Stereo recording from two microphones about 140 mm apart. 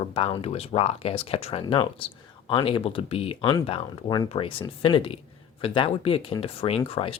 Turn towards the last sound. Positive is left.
turn(degrees=45)  # may be behind; listen again after turning